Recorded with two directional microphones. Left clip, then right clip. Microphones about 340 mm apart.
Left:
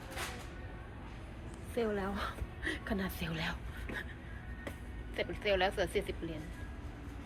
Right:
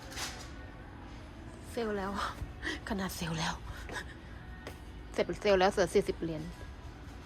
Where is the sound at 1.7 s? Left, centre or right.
Centre.